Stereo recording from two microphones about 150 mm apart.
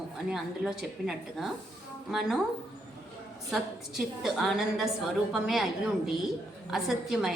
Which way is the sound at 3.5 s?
Centre (ahead or behind).